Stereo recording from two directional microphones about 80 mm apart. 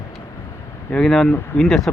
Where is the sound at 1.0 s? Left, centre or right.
Centre.